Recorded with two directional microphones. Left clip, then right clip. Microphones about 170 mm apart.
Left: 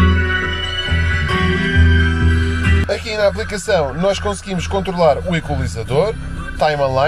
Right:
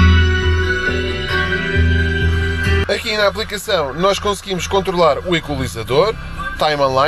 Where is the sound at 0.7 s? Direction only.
80° right.